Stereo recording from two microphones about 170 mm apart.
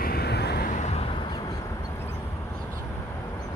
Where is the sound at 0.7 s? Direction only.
45° left (ahead or behind).